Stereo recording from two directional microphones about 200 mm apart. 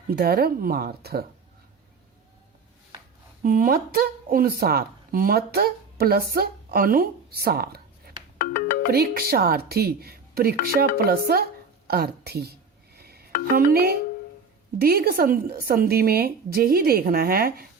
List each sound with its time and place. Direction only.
0.1 s a woman's voice: 50° right (ahead or behind)
3.4 s a woman's voice: 45° right (ahead or behind)
8.4 s music: 45° left (ahead or behind)
8.9 s a woman's voice: 50° right (ahead or behind)
13.0 s a sound: 50° right (ahead or behind)
13.6 s a woman's voice: 45° right (ahead or behind)